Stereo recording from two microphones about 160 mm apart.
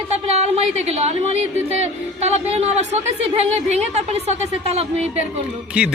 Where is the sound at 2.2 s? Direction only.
40° right (ahead or behind).